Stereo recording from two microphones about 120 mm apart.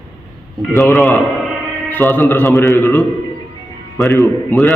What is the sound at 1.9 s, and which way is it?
Speech, 15° left (ahead or behind).